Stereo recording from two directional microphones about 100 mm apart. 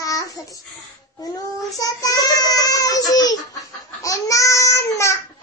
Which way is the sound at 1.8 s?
40° left (ahead or behind).